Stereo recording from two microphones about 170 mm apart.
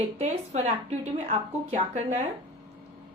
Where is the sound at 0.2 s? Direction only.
40° right (ahead or behind).